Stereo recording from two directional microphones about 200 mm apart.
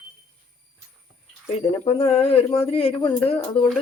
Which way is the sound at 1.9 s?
30° left (ahead or behind).